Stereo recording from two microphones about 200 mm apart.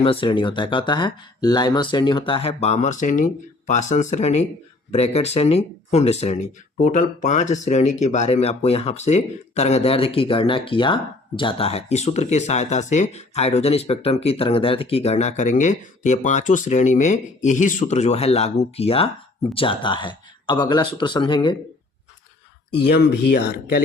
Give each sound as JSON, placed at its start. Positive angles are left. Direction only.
{"t": 0.0, "sound": "speech", "side_deg": 25}
{"t": 22.9, "sound": "speech", "side_deg": 60}